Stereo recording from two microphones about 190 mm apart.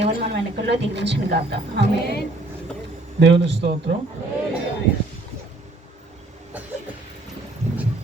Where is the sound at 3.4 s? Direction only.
65° right (ahead or behind).